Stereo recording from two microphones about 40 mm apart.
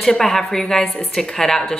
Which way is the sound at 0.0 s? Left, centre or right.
Centre.